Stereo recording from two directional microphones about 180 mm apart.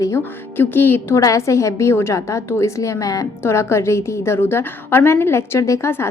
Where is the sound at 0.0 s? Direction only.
15° left (ahead or behind).